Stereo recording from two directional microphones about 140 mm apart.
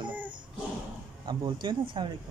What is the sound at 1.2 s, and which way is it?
Speech, 30° right (ahead or behind).